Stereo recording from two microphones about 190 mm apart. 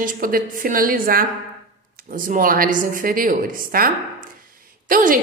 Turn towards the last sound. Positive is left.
turn(degrees=-45)  # may be behind; listen again after turning